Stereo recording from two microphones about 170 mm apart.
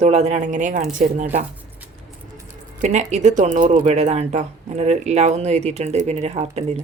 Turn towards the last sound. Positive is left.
turn(degrees=-40)  # may be behind; listen again after turning